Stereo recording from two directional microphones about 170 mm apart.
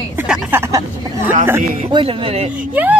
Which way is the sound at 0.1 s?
10° right (ahead or behind).